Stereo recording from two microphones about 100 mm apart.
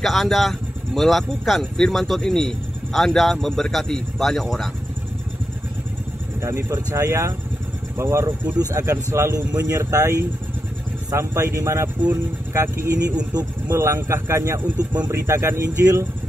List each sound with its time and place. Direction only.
0.0 s speech: centre (ahead or behind)
6.4 s speech: 25° right (ahead or behind)